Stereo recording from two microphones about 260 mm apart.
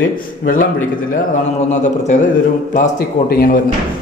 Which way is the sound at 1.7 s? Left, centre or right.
Left.